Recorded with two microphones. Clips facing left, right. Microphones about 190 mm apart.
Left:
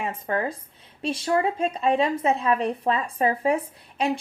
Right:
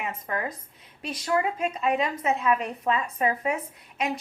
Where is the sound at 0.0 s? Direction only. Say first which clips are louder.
Left 4 dB; 30° left (ahead or behind).